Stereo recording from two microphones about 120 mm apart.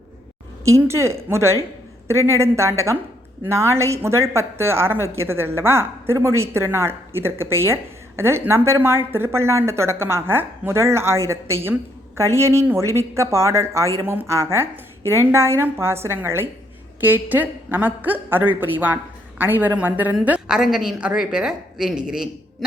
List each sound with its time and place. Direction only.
0.7 s a woman's voice: 25° right (ahead or behind); by 22.3 s 5° right (ahead or behind)